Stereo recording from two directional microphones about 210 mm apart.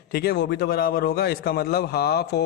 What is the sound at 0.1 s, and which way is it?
A man's voice, 50° left (ahead or behind).